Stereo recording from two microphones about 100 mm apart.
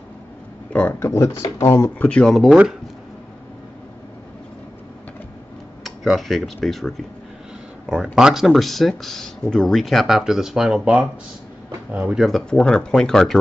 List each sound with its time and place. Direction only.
0.7 s speech: 20° left (ahead or behind)
2.0 s speech: 10° left (ahead or behind)
5.9 s speech: centre (ahead or behind)
7.9 s speech: 10° right (ahead or behind)
12.3 s speech: 5° left (ahead or behind)